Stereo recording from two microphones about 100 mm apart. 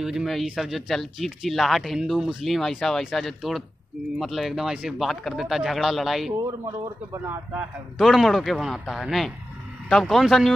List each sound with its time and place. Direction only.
0.0 s speech: 5° right (ahead or behind)
7.1 s speech: 30° right (ahead or behind)
8.0 s speech: centre (ahead or behind)